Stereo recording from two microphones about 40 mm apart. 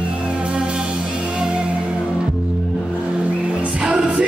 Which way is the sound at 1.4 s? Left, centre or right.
Right.